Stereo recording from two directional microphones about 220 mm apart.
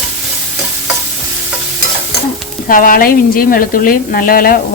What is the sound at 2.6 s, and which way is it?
Speech, 40° left (ahead or behind).